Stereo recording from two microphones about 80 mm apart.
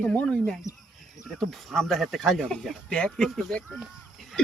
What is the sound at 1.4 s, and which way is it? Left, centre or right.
A man's voice, centre.